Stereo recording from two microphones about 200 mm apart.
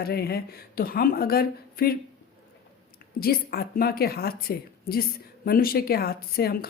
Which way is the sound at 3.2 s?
50° left (ahead or behind).